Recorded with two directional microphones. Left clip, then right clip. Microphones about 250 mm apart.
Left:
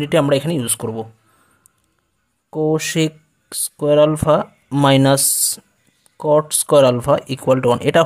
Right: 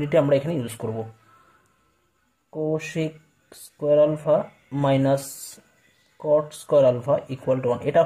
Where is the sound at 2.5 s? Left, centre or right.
Left.